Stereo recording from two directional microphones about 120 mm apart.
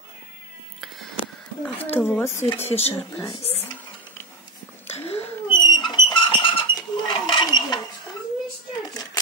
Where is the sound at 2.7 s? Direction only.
55° left (ahead or behind).